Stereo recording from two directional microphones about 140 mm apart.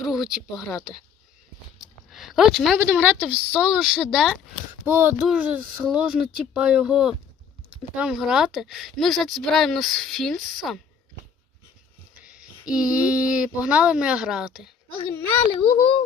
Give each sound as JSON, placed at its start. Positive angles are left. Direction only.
{"t": 0.0, "sound": "speech", "side_deg": 0}
{"t": 1.8, "sound": "a sound", "side_deg": 0}
{"t": 2.8, "sound": "a woman's voice", "side_deg": -10}
{"t": 4.9, "sound": "a woman's voice", "side_deg": -15}
{"t": 12.2, "sound": "speech", "side_deg": -5}
{"t": 15.1, "sound": "a child's voice", "side_deg": 15}
{"t": 15.7, "sound": "speech", "side_deg": 40}